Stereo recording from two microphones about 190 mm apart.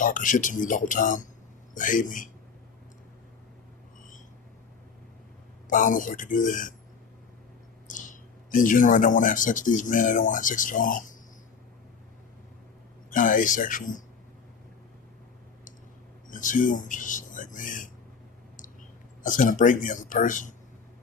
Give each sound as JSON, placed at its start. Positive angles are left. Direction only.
{"t": 0.0, "sound": "speech", "side_deg": 45}
{"t": 5.6, "sound": "speech", "side_deg": 45}
{"t": 8.4, "sound": "speech", "side_deg": 45}
{"t": 13.1, "sound": "speech", "side_deg": 45}
{"t": 16.3, "sound": "speech", "side_deg": 45}
{"t": 19.2, "sound": "speech", "side_deg": 45}